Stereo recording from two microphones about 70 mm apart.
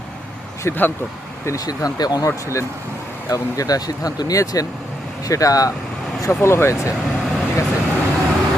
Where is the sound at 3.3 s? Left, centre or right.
Left.